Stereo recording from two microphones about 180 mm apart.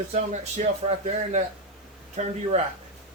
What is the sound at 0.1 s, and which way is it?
Speech, 40° right (ahead or behind).